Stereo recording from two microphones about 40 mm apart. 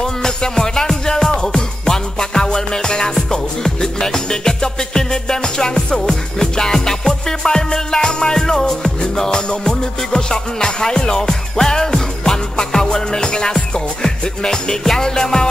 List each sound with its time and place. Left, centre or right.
0.0 s music: centre